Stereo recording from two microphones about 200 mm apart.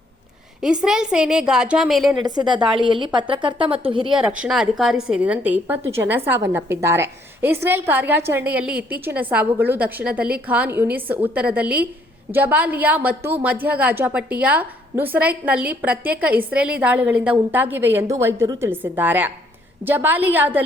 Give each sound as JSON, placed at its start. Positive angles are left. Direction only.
{"t": 0.6, "sound": "a woman's voice", "side_deg": -5}
{"t": 2.2, "sound": "a woman's voice", "side_deg": -20}
{"t": 4.2, "sound": "a woman's voice", "side_deg": -5}